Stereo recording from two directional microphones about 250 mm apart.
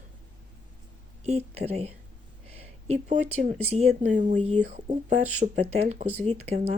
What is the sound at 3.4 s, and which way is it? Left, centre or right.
Speech, right.